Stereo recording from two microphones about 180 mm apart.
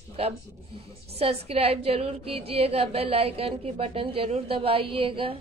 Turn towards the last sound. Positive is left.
turn(degrees=-30)  # may be behind; listen again after turning